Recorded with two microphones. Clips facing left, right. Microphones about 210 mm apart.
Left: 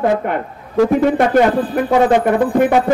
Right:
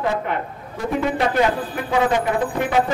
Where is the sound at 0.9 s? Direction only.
50° left (ahead or behind).